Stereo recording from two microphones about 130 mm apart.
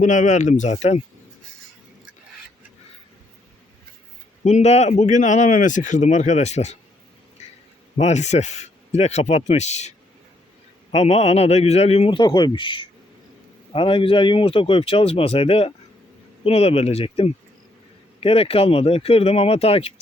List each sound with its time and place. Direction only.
0.0 s speech: 75° left (ahead or behind); by 1.0 s 55° left (ahead or behind)
4.4 s speech: 60° left (ahead or behind)
7.4 s a sound: 60° left (ahead or behind)
7.9 s speech: 60° left (ahead or behind)
10.9 s a man's voice: 55° left (ahead or behind)